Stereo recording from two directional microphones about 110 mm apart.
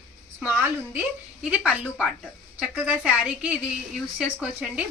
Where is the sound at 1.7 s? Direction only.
5° right (ahead or behind).